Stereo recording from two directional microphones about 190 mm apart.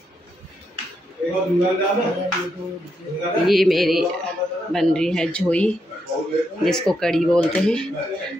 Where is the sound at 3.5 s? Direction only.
Centre (ahead or behind).